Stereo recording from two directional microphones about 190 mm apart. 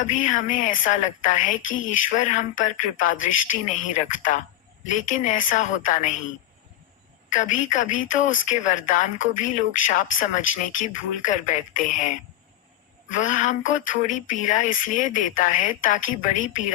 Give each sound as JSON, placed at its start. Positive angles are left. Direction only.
{"t": 0.0, "sound": "speech", "side_deg": 40}
{"t": 7.3, "sound": "speech", "side_deg": 40}